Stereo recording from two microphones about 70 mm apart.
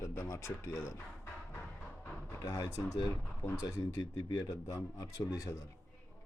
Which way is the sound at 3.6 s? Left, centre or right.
Left.